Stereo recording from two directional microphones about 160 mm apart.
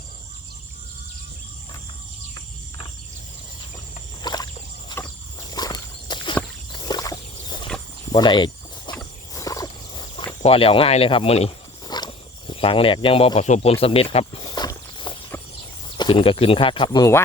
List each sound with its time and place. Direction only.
4.2 s rowboat: 25° left (ahead or behind)
4.9 s a sound: 25° left (ahead or behind)
5.5 s walk: 25° left (ahead or behind)
6.7 s a sound: 25° left (ahead or behind)
8.1 s speech: 30° left (ahead or behind)
8.9 s walk: 30° left (ahead or behind)
9.3 s wild animals: 20° left (ahead or behind)
10.4 s speech: 35° left (ahead or behind)
11.9 s speech: 30° left (ahead or behind)
14.5 s walk: 25° left (ahead or behind)
16.0 s speech: 30° left (ahead or behind)